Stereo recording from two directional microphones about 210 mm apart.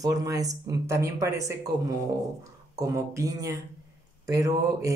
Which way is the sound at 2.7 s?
15° right (ahead or behind).